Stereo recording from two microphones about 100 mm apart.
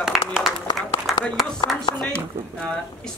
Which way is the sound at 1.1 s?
Centre (ahead or behind).